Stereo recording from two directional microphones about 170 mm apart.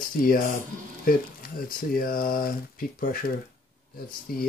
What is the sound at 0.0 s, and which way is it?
Speech, 60° left (ahead or behind).